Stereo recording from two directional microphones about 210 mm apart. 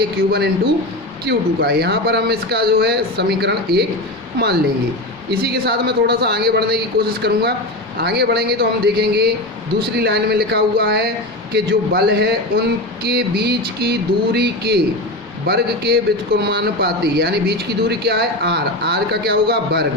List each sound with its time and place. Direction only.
0.3 s speech: 50° right (ahead or behind)
5.3 s speech: 50° right (ahead or behind)